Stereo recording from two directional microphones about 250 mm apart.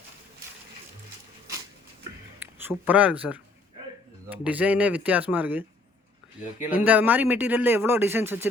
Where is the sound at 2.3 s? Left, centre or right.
Centre.